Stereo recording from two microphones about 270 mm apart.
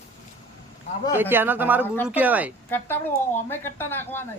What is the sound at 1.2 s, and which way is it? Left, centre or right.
Speech, centre.